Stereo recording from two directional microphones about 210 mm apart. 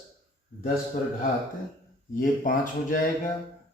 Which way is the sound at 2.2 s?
40° left (ahead or behind).